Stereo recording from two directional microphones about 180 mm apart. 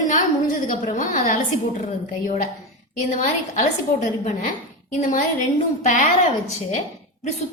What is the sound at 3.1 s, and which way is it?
A woman's voice, 40° left (ahead or behind).